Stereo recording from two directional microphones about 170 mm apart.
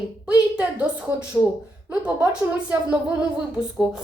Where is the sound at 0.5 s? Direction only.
10° right (ahead or behind).